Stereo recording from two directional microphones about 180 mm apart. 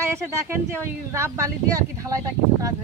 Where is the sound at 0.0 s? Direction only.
15° right (ahead or behind).